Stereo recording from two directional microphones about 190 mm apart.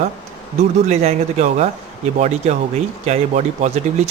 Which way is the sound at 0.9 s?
35° right (ahead or behind).